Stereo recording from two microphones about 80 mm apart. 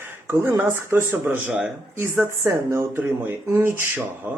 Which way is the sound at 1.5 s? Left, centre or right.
Centre.